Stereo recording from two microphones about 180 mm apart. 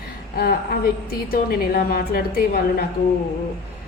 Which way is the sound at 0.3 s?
55° left (ahead or behind).